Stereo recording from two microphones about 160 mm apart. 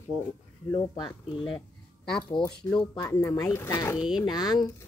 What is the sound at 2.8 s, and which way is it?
Speech, 20° left (ahead or behind).